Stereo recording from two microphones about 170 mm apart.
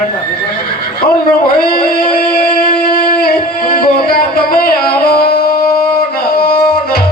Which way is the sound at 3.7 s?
60° left (ahead or behind).